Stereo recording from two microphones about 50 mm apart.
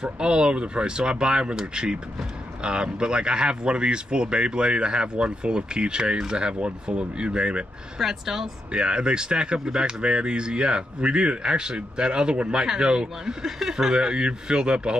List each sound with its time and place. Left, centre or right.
0.0 s speech: centre
8.0 s speech: centre